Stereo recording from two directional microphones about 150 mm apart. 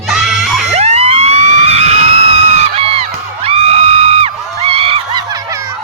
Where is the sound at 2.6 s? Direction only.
40° right (ahead or behind).